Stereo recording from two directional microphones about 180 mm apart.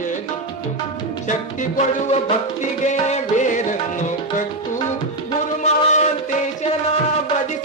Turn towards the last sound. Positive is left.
turn(degrees=40)  # may be behind; listen again after turning